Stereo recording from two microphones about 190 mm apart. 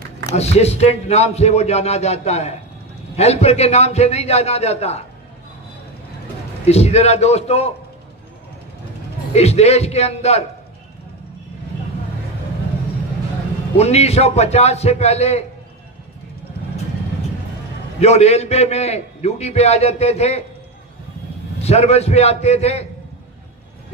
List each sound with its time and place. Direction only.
0.4 s a man's voice: 35° left (ahead or behind)
6.6 s a man's voice: 35° left (ahead or behind)
9.3 s a man's voice: 35° left (ahead or behind)
13.7 s a man's voice: 35° left (ahead or behind)
18.0 s a man's voice: 35° left (ahead or behind)
21.6 s a man's voice: 35° left (ahead or behind)